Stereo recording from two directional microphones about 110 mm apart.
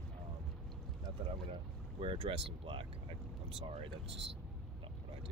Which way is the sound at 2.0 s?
60° right (ahead or behind).